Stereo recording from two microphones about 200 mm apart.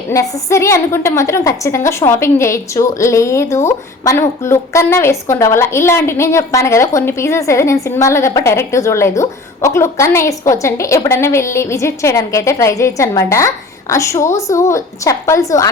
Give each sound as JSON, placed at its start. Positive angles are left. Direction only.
{"t": 0.1, "sound": "a woman's voice", "side_deg": 15}